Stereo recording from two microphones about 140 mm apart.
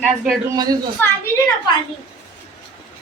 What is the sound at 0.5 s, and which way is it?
Speech, 25° right (ahead or behind).